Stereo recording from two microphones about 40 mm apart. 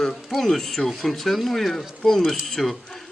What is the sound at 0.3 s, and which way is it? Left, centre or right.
Speech, centre.